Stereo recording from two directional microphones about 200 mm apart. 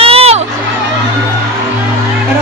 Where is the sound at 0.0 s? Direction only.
30° right (ahead or behind).